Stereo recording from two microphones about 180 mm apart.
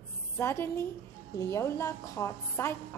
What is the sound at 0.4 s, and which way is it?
A woman's voice, 15° left (ahead or behind).